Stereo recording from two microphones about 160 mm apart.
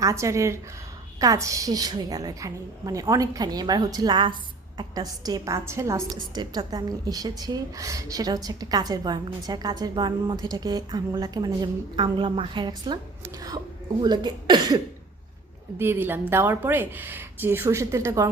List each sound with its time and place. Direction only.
0.0 s a woman's voice: 20° right (ahead or behind)
14.0 s a woman's voice: 25° right (ahead or behind)
15.8 s speech: 15° right (ahead or behind)